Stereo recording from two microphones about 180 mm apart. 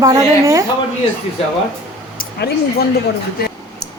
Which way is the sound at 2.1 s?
55° left (ahead or behind).